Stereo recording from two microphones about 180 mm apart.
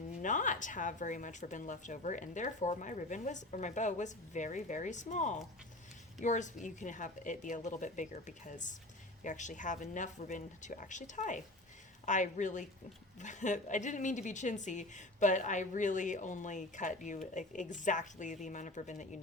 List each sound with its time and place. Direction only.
0.2 s a woman's voice: 45° left (ahead or behind)